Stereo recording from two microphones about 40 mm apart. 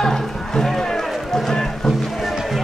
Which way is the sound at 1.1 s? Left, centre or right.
Centre.